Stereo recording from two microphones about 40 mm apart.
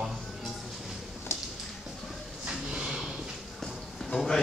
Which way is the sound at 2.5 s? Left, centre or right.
Centre.